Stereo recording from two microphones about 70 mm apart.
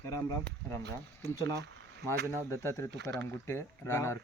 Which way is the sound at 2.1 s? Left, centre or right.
Left.